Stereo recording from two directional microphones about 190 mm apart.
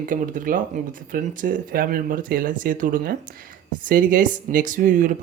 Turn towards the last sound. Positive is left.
turn(degrees=-45)  # may be behind; listen again after turning